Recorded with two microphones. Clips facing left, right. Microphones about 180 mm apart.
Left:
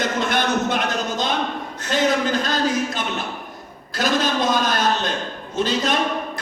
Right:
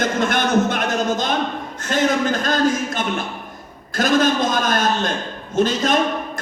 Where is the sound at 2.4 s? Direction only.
50° right (ahead or behind).